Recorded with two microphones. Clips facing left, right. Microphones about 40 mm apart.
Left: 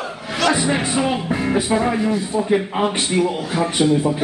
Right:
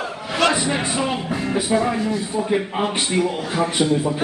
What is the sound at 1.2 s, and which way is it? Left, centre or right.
Speech, centre.